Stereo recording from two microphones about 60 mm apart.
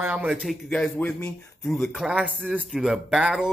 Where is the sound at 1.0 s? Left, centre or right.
Left.